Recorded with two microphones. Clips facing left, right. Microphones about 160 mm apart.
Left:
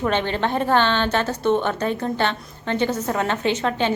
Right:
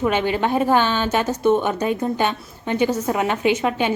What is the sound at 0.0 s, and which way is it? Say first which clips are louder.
A woman's voice: right 2 dB; 10° right (ahead or behind).